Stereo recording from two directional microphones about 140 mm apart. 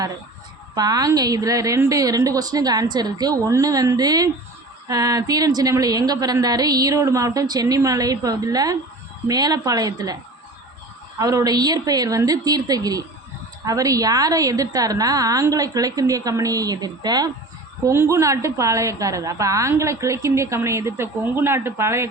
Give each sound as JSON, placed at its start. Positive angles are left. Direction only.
{"t": 0.8, "sound": "a woman's voice", "side_deg": -25}
{"t": 11.2, "sound": "a woman's voice", "side_deg": -25}